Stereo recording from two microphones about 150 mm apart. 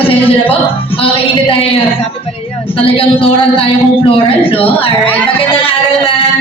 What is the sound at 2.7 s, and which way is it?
A man's voice, 40° left (ahead or behind).